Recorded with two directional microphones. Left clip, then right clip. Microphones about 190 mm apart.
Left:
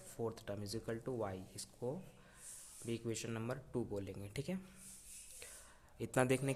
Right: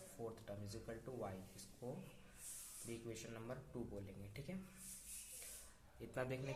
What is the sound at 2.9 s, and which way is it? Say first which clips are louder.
Speech: left 9 dB; 50° left (ahead or behind).